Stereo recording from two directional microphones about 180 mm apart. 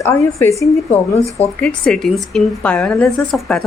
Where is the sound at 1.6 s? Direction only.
5° left (ahead or behind).